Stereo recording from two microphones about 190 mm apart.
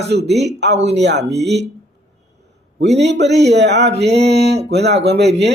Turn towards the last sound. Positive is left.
turn(degrees=-60)  # may be behind; listen again after turning